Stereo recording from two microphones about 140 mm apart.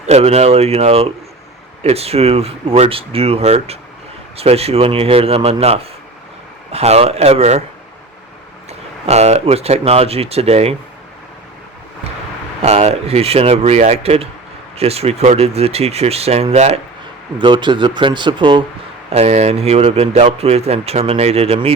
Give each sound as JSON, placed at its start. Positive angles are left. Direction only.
{"t": 0.0, "sound": "a man's voice", "side_deg": -50}
{"t": 9.0, "sound": "a man's voice", "side_deg": -50}
{"t": 12.6, "sound": "a man's voice", "side_deg": -50}
{"t": 17.3, "sound": "speech", "side_deg": -35}
{"t": 19.1, "sound": "a man's voice", "side_deg": -50}